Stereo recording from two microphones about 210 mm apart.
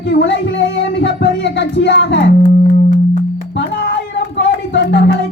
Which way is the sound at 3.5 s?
55° left (ahead or behind).